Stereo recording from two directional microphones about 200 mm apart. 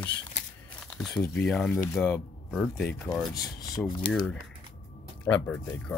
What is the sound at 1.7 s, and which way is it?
Speech, 15° left (ahead or behind).